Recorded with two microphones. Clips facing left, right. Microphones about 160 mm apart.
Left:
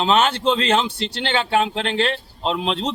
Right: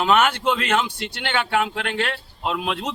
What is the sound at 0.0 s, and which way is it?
A man's voice, 25° left (ahead or behind).